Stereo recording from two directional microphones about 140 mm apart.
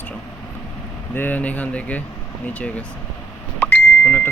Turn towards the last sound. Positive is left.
turn(degrees=10)  # may be behind; listen again after turning